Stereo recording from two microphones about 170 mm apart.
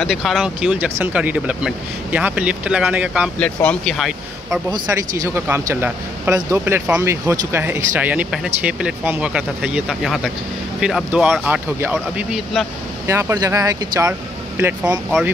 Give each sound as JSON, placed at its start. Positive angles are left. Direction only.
{"t": 0.0, "sound": "speech", "side_deg": 0}
{"t": 3.3, "sound": "speech", "side_deg": 5}
{"t": 4.6, "sound": "speech", "side_deg": -20}
{"t": 13.0, "sound": "speech", "side_deg": -15}